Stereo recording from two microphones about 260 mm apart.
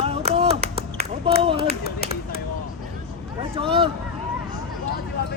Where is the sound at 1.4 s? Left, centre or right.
Right.